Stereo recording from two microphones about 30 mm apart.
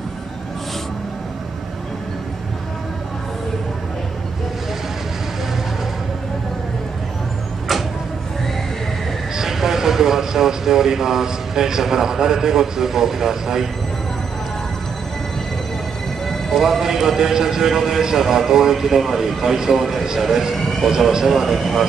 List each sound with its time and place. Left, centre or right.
9.4 s speech: centre
16.8 s speech: centre
20.5 s speech: centre
21.1 s speech: centre